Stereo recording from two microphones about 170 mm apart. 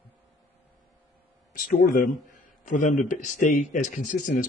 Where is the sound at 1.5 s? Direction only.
50° left (ahead or behind).